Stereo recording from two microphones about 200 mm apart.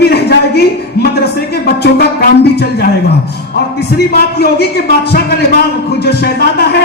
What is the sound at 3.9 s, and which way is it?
A man's voice, 55° left (ahead or behind).